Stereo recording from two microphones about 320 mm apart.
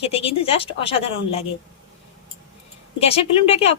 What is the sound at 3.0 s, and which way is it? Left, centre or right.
Speech, centre.